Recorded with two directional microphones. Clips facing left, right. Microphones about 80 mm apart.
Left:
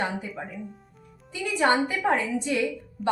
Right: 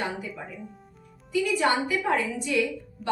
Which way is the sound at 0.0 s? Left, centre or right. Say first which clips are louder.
Left 2 dB; left.